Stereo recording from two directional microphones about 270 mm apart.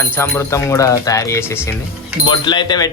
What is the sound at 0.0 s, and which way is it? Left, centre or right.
Speech, centre.